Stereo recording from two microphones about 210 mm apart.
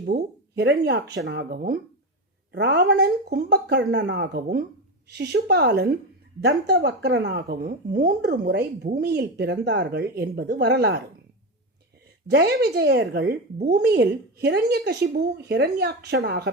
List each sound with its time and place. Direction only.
0.0 s speech: 50° right (ahead or behind)
12.3 s speech: 50° right (ahead or behind)